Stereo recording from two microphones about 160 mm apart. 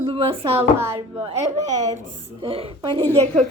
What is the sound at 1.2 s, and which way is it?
Speech, 45° right (ahead or behind).